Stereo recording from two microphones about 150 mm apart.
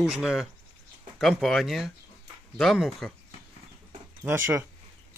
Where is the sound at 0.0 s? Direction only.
Centre (ahead or behind).